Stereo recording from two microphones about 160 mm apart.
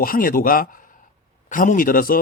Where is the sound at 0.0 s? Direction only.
65° left (ahead or behind).